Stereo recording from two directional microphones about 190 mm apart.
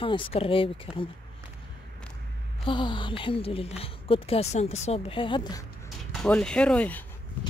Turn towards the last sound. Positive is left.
turn(degrees=5)  # may be behind; listen again after turning